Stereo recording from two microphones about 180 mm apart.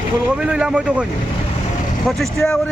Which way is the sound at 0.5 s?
5° right (ahead or behind).